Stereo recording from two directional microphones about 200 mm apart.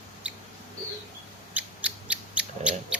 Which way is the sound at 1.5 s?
5° right (ahead or behind).